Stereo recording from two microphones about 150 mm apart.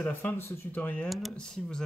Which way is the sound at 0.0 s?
10° left (ahead or behind).